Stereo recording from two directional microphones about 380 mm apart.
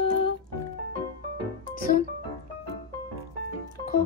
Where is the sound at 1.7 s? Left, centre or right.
Left.